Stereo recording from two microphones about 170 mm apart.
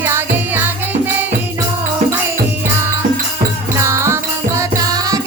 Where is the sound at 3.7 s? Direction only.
15° right (ahead or behind).